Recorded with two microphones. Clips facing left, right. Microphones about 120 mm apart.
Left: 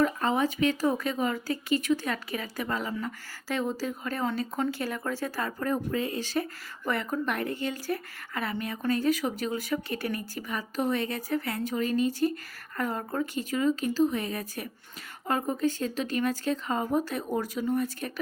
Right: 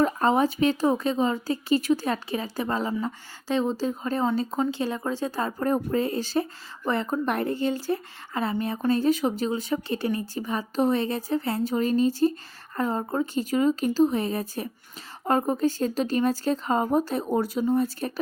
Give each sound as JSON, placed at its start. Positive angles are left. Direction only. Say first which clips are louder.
{"t": 0.0, "sound": "speech", "louder": "right 4 dB", "side_deg": -35}